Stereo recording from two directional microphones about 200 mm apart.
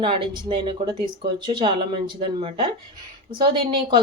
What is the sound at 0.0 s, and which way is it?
Speech, 25° right (ahead or behind).